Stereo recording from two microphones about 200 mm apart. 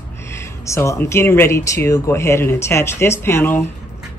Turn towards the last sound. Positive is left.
turn(degrees=10)  # may be behind; listen again after turning